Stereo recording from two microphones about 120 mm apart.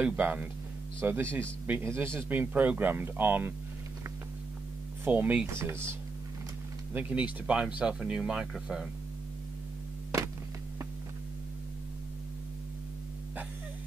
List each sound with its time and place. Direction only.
0.0 s speech: 15° right (ahead or behind)
5.0 s speech: 15° right (ahead or behind)
6.9 s speech: 15° right (ahead or behind)